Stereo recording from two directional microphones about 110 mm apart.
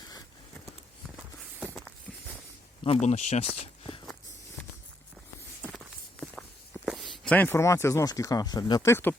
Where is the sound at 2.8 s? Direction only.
70° left (ahead or behind).